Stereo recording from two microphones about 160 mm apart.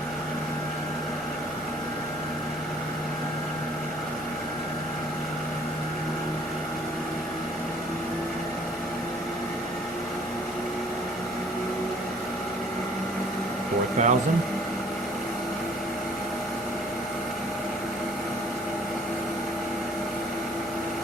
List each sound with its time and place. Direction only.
14.0 s speech: 50° right (ahead or behind)